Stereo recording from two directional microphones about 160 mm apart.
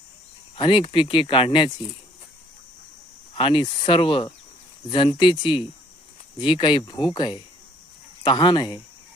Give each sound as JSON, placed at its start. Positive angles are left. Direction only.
{"t": 0.5, "sound": "speech", "side_deg": 30}
{"t": 3.3, "sound": "speech", "side_deg": 35}